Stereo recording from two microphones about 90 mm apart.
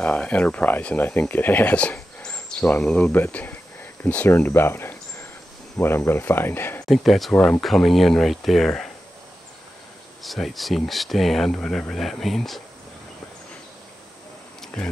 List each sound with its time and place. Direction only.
0.0 s speech: 15° left (ahead or behind)
4.5 s cricket: 25° left (ahead or behind)
5.8 s speech: 25° left (ahead or behind)
6.9 s speech: centre (ahead or behind)
10.2 s speech: centre (ahead or behind)
14.8 s speech: 5° left (ahead or behind)